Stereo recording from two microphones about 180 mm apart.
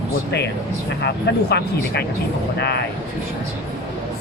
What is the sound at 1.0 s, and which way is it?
Speech, 65° left (ahead or behind).